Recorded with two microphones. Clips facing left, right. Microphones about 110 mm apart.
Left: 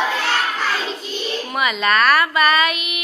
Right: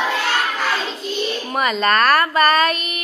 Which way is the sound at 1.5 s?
40° right (ahead or behind).